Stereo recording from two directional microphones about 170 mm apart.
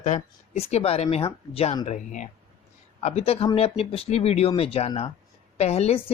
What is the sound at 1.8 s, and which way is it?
Speech, 45° left (ahead or behind).